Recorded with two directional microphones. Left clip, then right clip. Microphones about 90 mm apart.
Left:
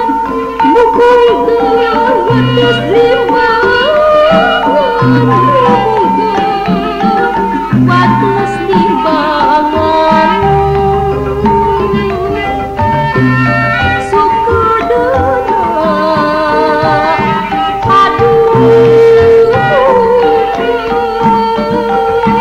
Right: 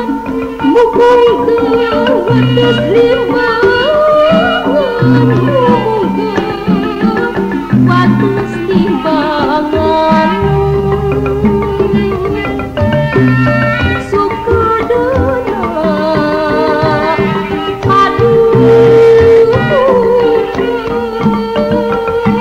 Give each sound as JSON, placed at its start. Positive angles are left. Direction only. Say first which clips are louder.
{"t": 0.7, "sound": "music", "louder": "even", "side_deg": -25}
{"t": 7.8, "sound": "music", "louder": "left 2 dB", "side_deg": -30}
{"t": 9.9, "sound": "music", "louder": "left 3 dB", "side_deg": -40}
{"t": 17.9, "sound": "music", "louder": "left 1 dB", "side_deg": -30}